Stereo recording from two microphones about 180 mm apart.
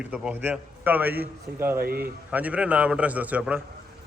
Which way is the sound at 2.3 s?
10° right (ahead or behind).